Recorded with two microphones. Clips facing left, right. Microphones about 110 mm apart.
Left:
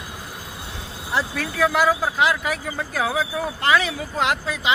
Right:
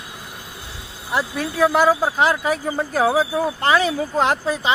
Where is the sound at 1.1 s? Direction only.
20° right (ahead or behind).